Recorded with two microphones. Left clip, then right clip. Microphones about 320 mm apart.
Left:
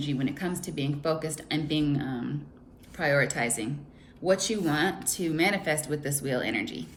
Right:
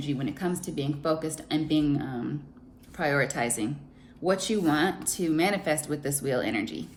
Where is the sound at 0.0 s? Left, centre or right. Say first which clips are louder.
Even; centre.